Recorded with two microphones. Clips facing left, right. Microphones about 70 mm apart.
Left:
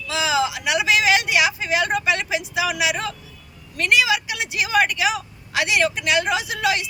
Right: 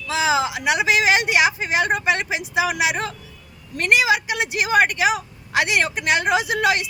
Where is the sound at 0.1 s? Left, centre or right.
Right.